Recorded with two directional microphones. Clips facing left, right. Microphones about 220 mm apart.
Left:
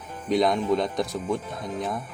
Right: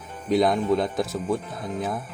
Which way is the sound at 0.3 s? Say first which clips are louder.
Right 1 dB; centre (ahead or behind).